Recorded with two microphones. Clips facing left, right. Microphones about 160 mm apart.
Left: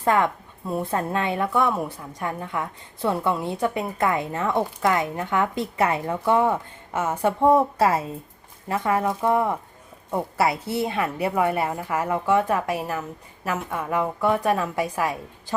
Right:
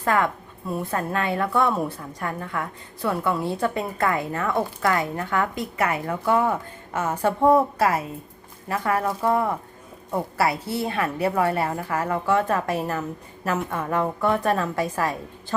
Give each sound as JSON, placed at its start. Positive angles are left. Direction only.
{"t": 0.0, "sound": "a woman's voice", "side_deg": 20}